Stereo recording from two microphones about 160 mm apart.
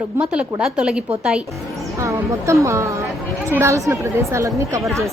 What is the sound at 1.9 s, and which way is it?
A woman's voice, 20° right (ahead or behind).